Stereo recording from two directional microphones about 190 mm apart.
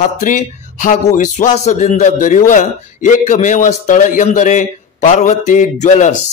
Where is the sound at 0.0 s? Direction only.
45° left (ahead or behind).